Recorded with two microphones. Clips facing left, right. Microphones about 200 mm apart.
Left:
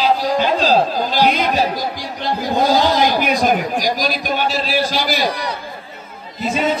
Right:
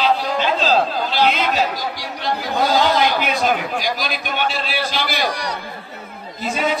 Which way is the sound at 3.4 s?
45° left (ahead or behind).